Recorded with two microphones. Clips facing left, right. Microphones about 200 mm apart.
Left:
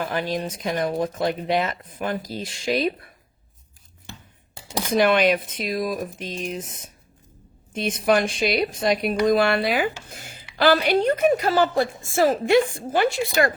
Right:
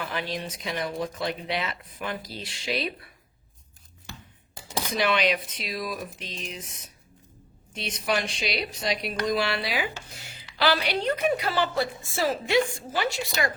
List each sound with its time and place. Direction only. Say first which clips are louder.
0.0 s speech: left 6 dB; 45° left (ahead or behind)
4.9 s speech: left 7 dB; 50° left (ahead or behind)
10.2 s a sound: left 5 dB; 50° left (ahead or behind)
10.6 s speech: left 7 dB; 50° left (ahead or behind)